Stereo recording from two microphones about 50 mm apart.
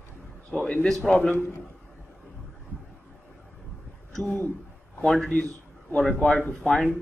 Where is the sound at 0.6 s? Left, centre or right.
Centre.